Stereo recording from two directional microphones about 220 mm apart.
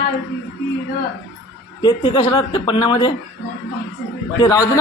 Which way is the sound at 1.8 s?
20° left (ahead or behind).